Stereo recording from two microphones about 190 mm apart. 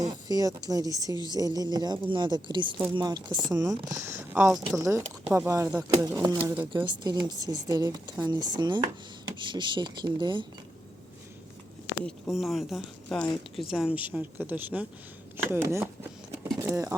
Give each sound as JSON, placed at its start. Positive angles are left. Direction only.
{"t": 0.1, "sound": "speech", "side_deg": -20}
{"t": 4.8, "sound": "speech", "side_deg": -15}
{"t": 6.8, "sound": "speech", "side_deg": -20}
{"t": 12.0, "sound": "speech", "side_deg": 0}
{"t": 16.6, "sound": "a sound", "side_deg": -15}